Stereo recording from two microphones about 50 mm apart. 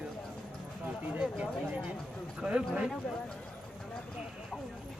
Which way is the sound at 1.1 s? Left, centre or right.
Right.